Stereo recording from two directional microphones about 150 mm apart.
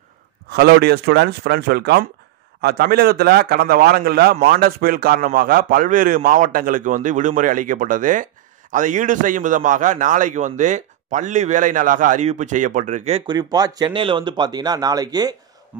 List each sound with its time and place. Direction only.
0.5 s a man's voice: 90° right; by 13.2 s 50° right (ahead or behind)
13.3 s speech: 25° right (ahead or behind)
15.7 s speech: 10° right (ahead or behind)